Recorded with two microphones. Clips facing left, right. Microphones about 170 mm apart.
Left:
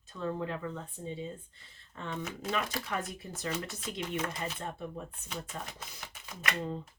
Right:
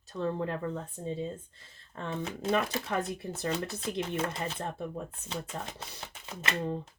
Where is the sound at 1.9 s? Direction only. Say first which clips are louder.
Right 3 dB; 45° right (ahead or behind).